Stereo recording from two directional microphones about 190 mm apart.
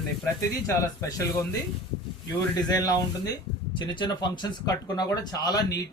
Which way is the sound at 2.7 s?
20° left (ahead or behind).